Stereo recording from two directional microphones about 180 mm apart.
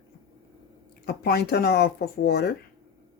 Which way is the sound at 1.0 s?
60° left (ahead or behind).